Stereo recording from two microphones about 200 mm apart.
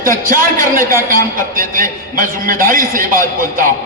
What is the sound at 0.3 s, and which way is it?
A man's voice, 45° right (ahead or behind).